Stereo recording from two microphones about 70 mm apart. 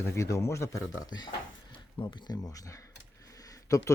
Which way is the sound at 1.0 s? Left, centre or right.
Left.